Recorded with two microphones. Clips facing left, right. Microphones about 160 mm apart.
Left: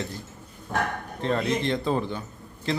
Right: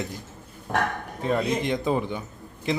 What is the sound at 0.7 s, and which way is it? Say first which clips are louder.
Speech: right 2 dB; 70° right (ahead or behind).